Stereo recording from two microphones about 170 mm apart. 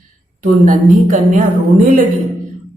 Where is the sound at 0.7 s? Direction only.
50° right (ahead or behind).